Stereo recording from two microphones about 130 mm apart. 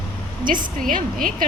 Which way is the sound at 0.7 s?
90° right.